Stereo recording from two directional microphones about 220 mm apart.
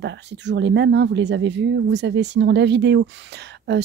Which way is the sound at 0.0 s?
55° right (ahead or behind).